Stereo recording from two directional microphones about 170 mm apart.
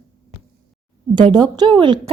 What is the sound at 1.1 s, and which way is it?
Speech, 25° right (ahead or behind).